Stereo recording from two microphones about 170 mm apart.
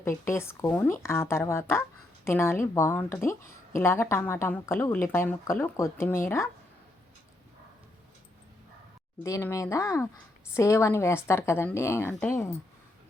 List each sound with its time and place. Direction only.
0.3 s speech: 15° left (ahead or behind)
9.2 s speech: 20° left (ahead or behind)